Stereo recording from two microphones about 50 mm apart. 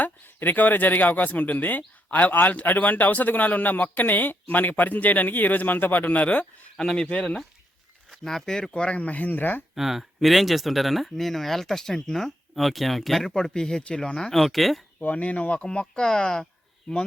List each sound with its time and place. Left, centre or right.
0.0 s speech: left
6.7 s speech: centre
8.2 s speech: centre; by 9.6 s left
9.7 s speech: centre
14.4 s speech: centre
15.0 s speech: left
15.6 s speech: centre